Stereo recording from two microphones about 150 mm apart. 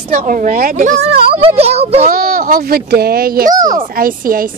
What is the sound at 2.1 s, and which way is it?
Speech, 75° right (ahead or behind).